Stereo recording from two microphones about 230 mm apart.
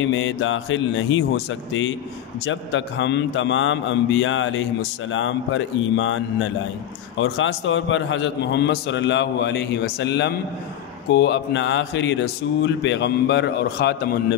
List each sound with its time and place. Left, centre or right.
0.0 s a man's voice: left